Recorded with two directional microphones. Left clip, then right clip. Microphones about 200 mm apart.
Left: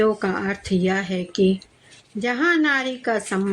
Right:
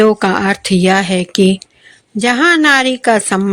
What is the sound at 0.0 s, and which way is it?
A woman's voice, 40° right (ahead or behind).